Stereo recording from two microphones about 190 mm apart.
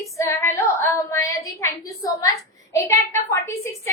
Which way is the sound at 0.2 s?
15° left (ahead or behind).